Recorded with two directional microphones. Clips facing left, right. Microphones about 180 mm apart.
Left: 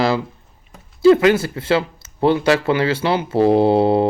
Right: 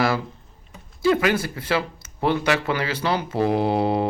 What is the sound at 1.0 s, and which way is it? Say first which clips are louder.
Speech: left 8 dB; 25° left (ahead or behind).